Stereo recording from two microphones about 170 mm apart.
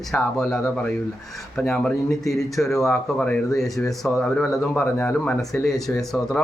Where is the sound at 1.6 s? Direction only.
10° left (ahead or behind).